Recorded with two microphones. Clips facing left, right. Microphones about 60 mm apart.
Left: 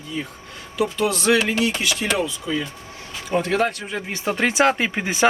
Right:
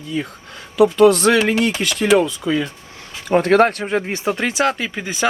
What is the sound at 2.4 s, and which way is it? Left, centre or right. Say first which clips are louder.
Speech: right 6 dB; right.